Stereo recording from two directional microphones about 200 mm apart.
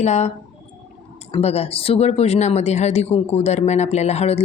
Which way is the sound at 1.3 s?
30° left (ahead or behind).